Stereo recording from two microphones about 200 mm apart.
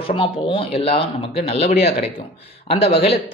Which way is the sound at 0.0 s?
25° left (ahead or behind).